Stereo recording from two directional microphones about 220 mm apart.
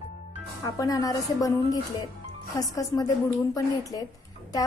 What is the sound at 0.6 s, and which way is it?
Speech, 15° left (ahead or behind).